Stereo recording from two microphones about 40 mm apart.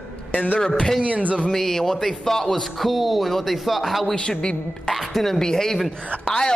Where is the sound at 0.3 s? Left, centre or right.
Left.